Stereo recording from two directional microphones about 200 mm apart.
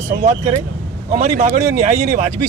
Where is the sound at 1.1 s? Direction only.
40° right (ahead or behind).